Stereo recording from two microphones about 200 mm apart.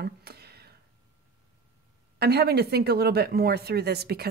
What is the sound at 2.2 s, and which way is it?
Speech, 55° right (ahead or behind).